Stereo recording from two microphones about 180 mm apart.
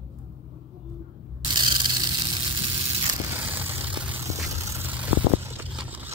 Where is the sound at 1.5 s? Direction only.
25° right (ahead or behind).